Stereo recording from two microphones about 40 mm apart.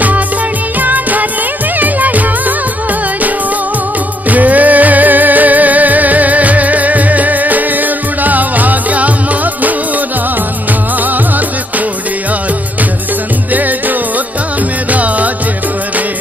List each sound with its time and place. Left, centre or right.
0.7 s music: right
4.3 s music: right
13.5 s music: right